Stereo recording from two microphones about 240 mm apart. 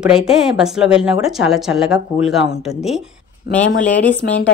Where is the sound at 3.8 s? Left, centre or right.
Centre.